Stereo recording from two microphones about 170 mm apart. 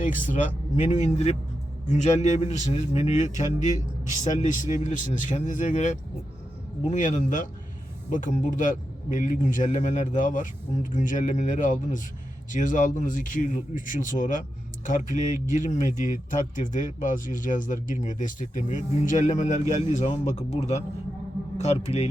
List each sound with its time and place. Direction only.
0.3 s a man's voice: 45° left (ahead or behind)